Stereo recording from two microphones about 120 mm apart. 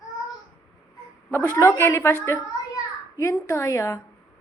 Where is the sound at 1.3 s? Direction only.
20° left (ahead or behind).